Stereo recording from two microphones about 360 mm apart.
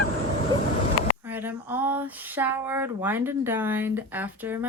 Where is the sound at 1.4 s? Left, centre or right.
Centre.